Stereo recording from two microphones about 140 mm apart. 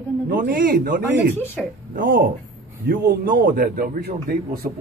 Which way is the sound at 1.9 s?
90° right.